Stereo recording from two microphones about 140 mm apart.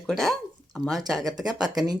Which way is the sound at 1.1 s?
25° right (ahead or behind).